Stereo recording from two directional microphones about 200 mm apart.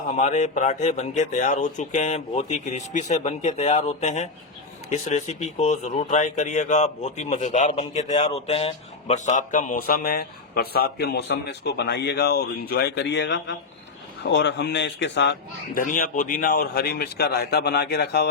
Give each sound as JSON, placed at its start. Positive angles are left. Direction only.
{"t": 0.2, "sound": "speech", "side_deg": 35}
{"t": 15.8, "sound": "speech", "side_deg": 45}